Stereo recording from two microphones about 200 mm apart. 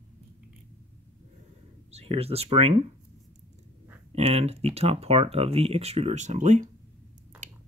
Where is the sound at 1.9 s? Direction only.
30° right (ahead or behind).